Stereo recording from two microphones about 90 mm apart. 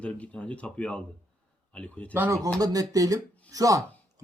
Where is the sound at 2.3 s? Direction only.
40° right (ahead or behind).